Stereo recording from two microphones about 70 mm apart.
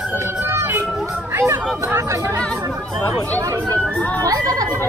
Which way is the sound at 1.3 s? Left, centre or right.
Right.